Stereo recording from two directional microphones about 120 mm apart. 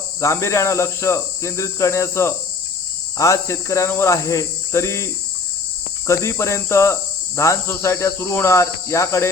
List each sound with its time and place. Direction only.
0.2 s cricket: 25° left (ahead or behind)
6.1 s cricket: 25° left (ahead or behind)